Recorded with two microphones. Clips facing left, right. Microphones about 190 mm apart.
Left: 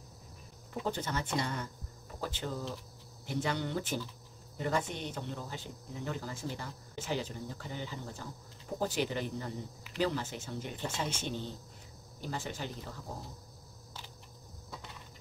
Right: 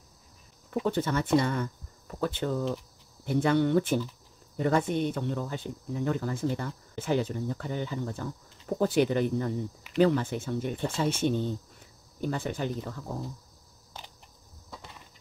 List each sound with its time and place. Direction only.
0.8 s speech: 60° right (ahead or behind)